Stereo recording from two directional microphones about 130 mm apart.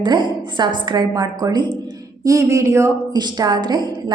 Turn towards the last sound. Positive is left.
turn(degrees=-35)  # may be behind; listen again after turning